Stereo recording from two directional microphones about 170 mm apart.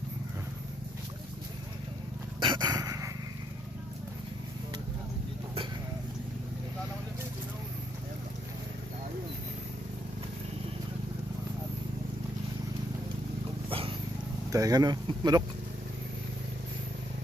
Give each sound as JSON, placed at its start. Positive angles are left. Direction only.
{"t": 2.4, "sound": "dog", "side_deg": -25}
{"t": 13.7, "sound": "vehicle", "side_deg": -35}
{"t": 14.5, "sound": "speech", "side_deg": -20}